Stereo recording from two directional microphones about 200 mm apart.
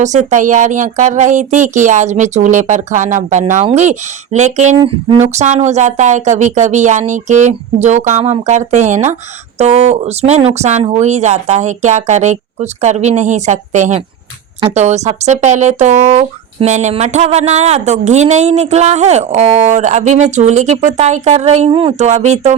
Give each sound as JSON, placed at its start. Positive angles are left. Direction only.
{"t": 0.0, "sound": "speech", "side_deg": -35}